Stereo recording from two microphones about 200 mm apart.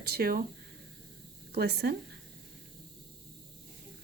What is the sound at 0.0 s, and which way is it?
Speech, 50° right (ahead or behind).